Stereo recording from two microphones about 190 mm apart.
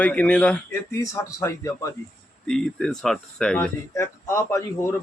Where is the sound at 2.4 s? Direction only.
Centre (ahead or behind).